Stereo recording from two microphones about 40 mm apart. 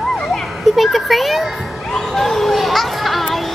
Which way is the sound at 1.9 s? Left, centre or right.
Centre.